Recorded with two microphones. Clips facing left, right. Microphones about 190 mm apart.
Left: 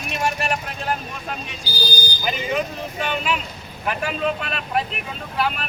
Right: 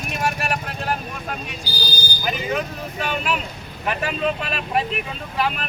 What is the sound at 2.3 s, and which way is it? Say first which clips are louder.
Speech: even; centre (ahead or behind).